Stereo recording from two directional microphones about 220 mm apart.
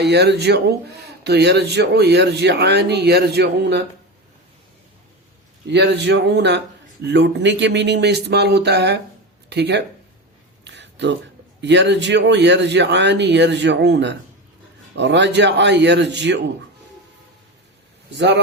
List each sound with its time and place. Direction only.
0.0 s speech: 50° right (ahead or behind)
5.6 s speech: 50° right (ahead or behind)
10.6 s a sound: 55° right (ahead or behind)
11.6 s speech: 50° right (ahead or behind)